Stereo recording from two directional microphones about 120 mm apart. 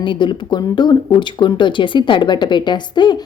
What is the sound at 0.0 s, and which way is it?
Speech, 40° left (ahead or behind).